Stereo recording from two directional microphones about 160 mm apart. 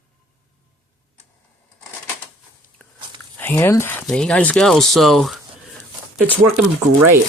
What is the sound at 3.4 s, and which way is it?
Speech, 15° left (ahead or behind).